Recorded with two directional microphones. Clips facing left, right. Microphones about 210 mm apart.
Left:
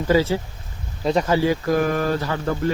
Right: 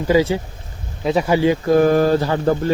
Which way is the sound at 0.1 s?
15° right (ahead or behind).